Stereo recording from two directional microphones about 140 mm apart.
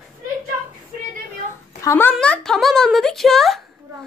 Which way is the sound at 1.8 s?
20° left (ahead or behind).